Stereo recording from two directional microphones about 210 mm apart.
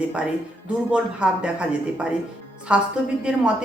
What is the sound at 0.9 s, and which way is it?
Speech, 5° right (ahead or behind).